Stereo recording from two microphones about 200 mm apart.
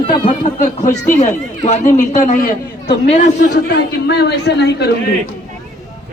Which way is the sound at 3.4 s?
55° left (ahead or behind).